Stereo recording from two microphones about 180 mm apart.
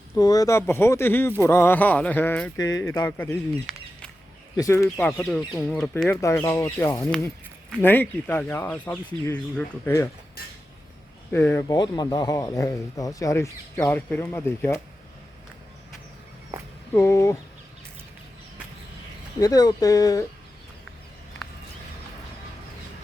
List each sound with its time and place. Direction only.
0.2 s speech: 20° left (ahead or behind)
2.6 s speech: 20° left (ahead or behind)
3.1 s speech: 10° left (ahead or behind)
4.5 s speech: 15° left (ahead or behind)
11.3 s speech: 10° left (ahead or behind)
16.9 s speech: 15° left (ahead or behind)
19.4 s speech: 20° left (ahead or behind)